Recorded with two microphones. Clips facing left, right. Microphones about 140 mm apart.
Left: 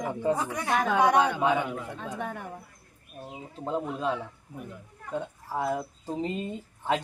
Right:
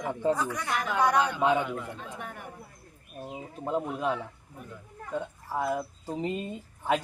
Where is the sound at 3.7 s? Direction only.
15° right (ahead or behind).